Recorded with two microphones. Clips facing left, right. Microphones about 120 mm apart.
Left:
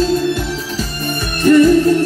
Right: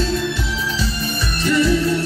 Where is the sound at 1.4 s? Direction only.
50° left (ahead or behind).